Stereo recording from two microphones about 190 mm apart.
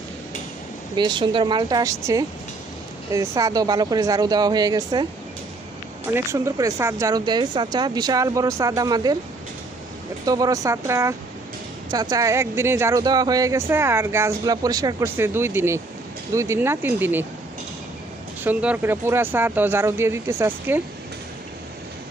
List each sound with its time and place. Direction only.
0.9 s speech: 25° right (ahead or behind)
6.1 s speech: 15° right (ahead or behind)
10.2 s speech: 20° right (ahead or behind)
18.4 s speech: 10° right (ahead or behind)